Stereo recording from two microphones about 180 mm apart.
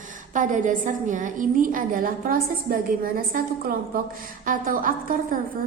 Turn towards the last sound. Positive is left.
turn(degrees=-50)  # may be behind; listen again after turning